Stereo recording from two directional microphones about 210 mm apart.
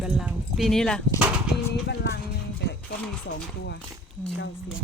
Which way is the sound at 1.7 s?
50° left (ahead or behind).